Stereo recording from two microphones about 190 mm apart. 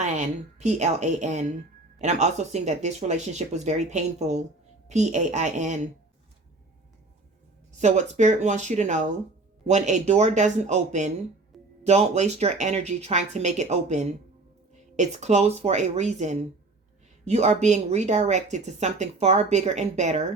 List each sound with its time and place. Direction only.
0.0 s speech: 35° right (ahead or behind)
7.8 s speech: 40° right (ahead or behind)